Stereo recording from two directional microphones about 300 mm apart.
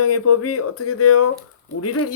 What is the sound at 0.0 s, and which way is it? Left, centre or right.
Speech, left.